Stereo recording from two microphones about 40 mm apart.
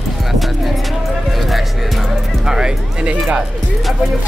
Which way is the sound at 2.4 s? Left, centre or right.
Centre.